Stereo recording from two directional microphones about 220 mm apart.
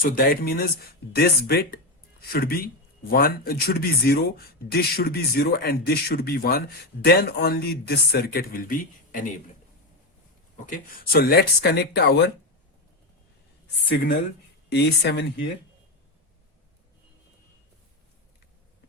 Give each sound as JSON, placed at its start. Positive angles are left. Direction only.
{"t": 0.0, "sound": "speech", "side_deg": 45}
{"t": 10.7, "sound": "speech", "side_deg": 45}
{"t": 14.7, "sound": "speech", "side_deg": 50}